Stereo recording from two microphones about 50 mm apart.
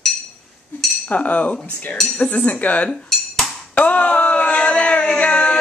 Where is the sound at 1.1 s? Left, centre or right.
Left.